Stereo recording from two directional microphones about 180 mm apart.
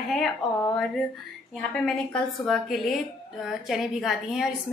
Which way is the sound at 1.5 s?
5° left (ahead or behind).